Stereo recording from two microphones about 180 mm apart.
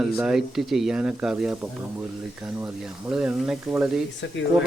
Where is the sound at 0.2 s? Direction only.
Centre (ahead or behind).